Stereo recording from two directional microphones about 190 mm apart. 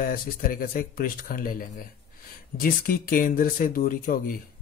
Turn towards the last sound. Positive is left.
turn(degrees=50)  # may be behind; listen again after turning